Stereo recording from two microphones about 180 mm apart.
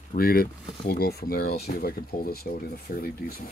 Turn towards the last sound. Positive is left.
turn(degrees=55)  # may be behind; listen again after turning